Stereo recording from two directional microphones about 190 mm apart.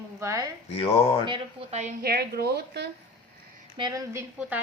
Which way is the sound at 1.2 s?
25° right (ahead or behind).